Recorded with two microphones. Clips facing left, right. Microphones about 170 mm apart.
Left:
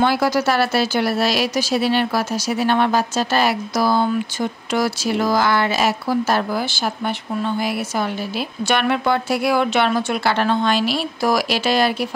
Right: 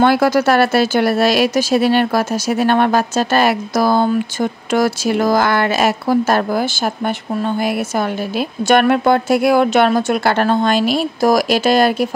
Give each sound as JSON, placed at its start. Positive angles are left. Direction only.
{"t": 0.0, "sound": "speech", "side_deg": -55}